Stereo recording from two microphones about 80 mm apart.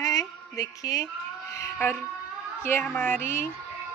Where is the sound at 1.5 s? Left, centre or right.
Left.